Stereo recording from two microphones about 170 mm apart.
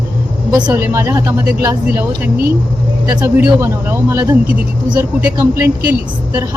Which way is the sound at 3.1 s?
10° right (ahead or behind).